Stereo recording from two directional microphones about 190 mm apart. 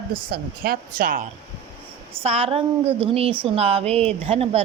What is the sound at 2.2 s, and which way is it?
A woman's voice, 30° right (ahead or behind).